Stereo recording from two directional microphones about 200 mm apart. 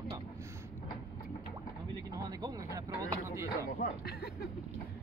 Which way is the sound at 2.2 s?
20° right (ahead or behind).